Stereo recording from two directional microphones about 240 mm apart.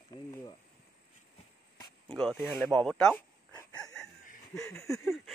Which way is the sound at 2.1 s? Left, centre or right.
Centre.